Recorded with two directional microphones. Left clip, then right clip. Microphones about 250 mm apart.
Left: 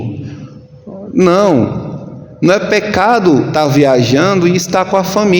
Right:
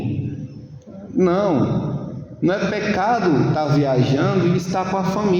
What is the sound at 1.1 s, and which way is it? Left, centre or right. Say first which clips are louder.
A man's voice: left 8 dB; left.